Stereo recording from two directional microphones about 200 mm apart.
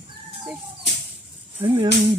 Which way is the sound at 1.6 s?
20° right (ahead or behind).